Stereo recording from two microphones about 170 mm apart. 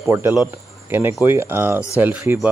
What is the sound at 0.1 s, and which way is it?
Speech, 15° right (ahead or behind).